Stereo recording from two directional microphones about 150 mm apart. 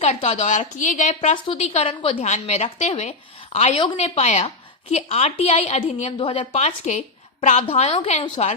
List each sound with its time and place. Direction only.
0.0 s a woman's voice: 45° left (ahead or behind)
2.2 s a woman's voice: 50° left (ahead or behind)